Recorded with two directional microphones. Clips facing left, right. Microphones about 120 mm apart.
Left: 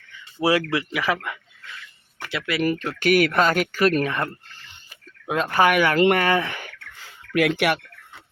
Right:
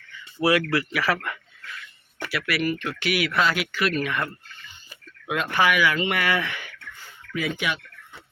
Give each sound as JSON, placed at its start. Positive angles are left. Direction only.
{"t": 0.3, "sound": "speech", "side_deg": 25}
{"t": 0.9, "sound": "dog", "side_deg": 15}
{"t": 2.3, "sound": "speech", "side_deg": 20}
{"t": 2.6, "sound": "speech", "side_deg": 40}
{"t": 7.0, "sound": "a sound", "side_deg": 80}